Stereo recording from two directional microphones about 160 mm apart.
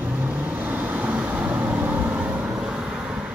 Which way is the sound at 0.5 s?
10° right (ahead or behind).